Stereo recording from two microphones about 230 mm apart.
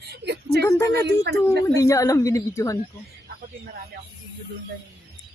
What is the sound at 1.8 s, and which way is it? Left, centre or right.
A woman's voice, centre.